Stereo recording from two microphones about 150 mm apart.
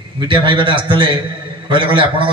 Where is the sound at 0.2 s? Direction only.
35° right (ahead or behind).